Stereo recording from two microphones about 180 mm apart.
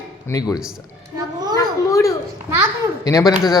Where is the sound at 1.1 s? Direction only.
20° right (ahead or behind).